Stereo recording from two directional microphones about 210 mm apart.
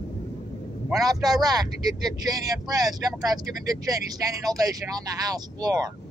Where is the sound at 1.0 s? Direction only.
20° right (ahead or behind).